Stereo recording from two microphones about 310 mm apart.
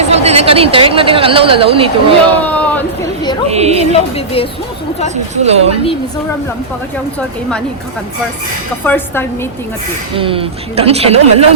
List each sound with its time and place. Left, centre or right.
0.0 s a woman's voice: right
2.4 s a sound: centre
3.5 s a woman's voice: right
5.4 s a woman's voice: centre
8.8 s speech: centre
10.2 s a woman's voice: centre